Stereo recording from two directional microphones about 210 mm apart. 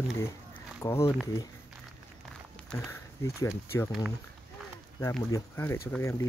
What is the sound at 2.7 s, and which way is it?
Speech, 15° left (ahead or behind).